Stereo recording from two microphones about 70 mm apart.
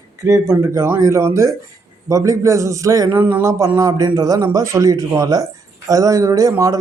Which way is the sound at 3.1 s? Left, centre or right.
Right.